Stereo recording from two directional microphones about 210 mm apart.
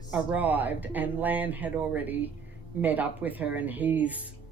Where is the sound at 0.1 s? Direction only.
5° right (ahead or behind).